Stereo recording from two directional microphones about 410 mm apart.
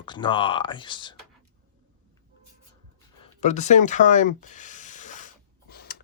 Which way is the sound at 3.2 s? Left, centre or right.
Centre.